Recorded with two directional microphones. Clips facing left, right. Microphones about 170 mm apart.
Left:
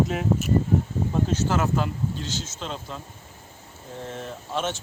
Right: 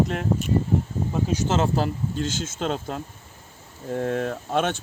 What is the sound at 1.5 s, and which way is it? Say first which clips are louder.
Speech: right 2 dB; 30° right (ahead or behind).